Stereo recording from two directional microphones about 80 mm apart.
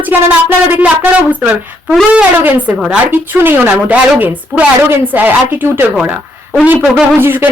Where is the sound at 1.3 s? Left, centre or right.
Centre.